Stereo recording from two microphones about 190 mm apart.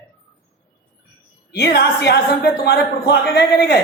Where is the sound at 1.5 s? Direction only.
60° left (ahead or behind).